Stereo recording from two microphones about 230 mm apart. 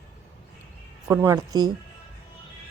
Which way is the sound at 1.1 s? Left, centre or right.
Centre.